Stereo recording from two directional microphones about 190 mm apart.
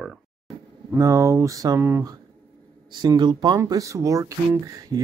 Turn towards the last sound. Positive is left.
turn(degrees=-15)  # may be behind; listen again after turning